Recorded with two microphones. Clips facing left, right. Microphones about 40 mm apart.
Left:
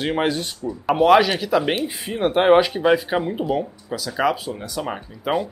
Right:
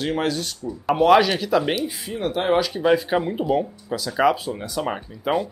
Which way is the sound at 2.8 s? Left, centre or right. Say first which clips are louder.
Left 1 dB; centre.